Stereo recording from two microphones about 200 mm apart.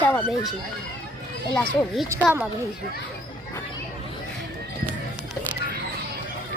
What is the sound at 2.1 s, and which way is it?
Speech, 10° right (ahead or behind).